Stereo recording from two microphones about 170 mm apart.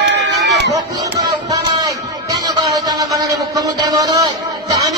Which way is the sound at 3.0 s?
20° right (ahead or behind).